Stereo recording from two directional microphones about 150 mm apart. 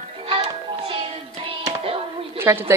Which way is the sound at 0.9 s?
40° right (ahead or behind).